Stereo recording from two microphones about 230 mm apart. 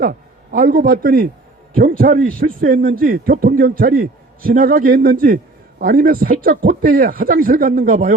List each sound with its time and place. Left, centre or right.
0.0 s a man's voice: right